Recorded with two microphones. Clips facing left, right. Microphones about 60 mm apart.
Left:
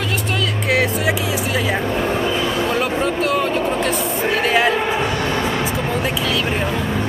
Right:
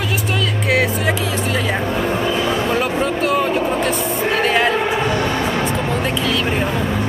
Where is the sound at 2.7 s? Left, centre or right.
Centre.